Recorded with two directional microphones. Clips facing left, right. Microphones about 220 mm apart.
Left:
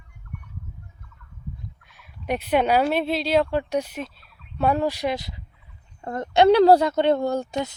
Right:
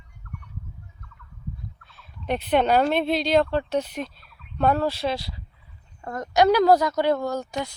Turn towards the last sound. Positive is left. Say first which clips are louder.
# left 3 dB
turn(degrees=25)  # may be behind; listen again after turning